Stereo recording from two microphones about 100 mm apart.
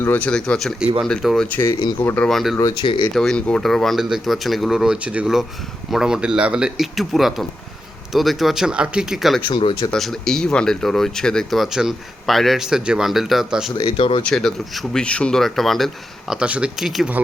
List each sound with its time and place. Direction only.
0.0 s speech: 15° left (ahead or behind)
1.5 s speech: 25° left (ahead or behind)
2.2 s speech: centre (ahead or behind)
2.6 s speech: 40° left (ahead or behind)
2.8 s speech: 55° left (ahead or behind)
3.2 s speech: 5° left (ahead or behind)
9.5 s speech: 60° left (ahead or behind)
9.9 s speech: 5° left (ahead or behind)
13.7 s speech: 70° left (ahead or behind)
14.3 s speech: 5° left (ahead or behind)
16.3 s speech: 10° right (ahead or behind)